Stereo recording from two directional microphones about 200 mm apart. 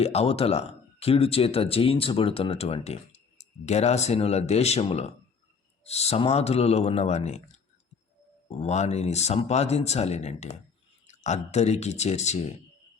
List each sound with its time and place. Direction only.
0.0 s speech: 30° left (ahead or behind)
8.4 s speech: 35° left (ahead or behind)